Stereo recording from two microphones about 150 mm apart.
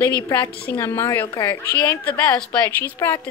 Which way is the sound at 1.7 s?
10° left (ahead or behind).